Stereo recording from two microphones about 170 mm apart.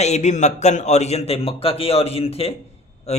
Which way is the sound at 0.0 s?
40° left (ahead or behind).